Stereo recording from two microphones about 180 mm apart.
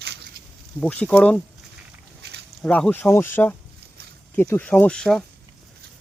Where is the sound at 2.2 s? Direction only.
65° right (ahead or behind).